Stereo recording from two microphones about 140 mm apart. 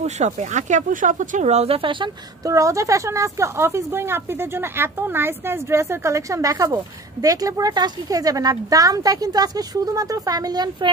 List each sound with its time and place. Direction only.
0.0 s speech: 55° right (ahead or behind); by 2.5 s 35° right (ahead or behind)
2.5 s speech: 25° right (ahead or behind)